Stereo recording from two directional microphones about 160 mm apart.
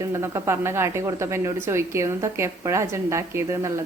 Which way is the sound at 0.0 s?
20° right (ahead or behind).